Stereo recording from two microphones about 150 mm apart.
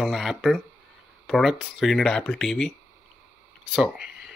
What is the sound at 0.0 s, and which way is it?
Speech, centre (ahead or behind).